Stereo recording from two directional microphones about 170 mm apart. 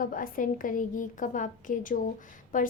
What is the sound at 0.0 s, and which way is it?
A woman's voice, 55° left (ahead or behind).